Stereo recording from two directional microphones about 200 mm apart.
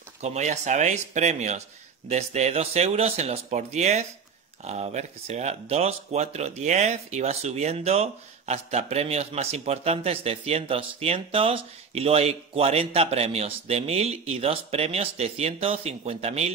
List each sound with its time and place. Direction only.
0.2 s speech: 35° right (ahead or behind)